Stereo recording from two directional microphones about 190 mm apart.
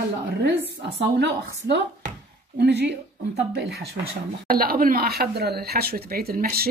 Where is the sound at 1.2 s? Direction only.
65° right (ahead or behind).